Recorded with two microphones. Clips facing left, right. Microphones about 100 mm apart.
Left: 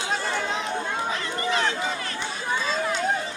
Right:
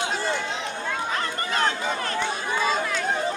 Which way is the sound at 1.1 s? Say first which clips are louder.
Even; 45° right (ahead or behind).